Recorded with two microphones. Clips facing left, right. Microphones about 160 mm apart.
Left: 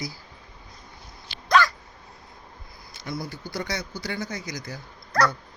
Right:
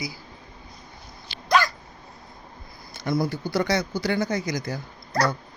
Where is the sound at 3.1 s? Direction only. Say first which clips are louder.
Right 9 dB; 85° right.